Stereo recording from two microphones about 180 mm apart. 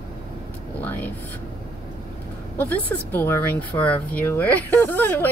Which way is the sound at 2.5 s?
10° left (ahead or behind).